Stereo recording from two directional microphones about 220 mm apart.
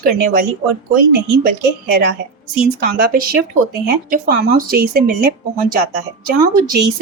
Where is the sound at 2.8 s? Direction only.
45° right (ahead or behind).